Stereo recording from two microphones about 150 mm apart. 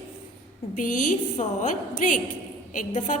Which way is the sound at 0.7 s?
60° left (ahead or behind).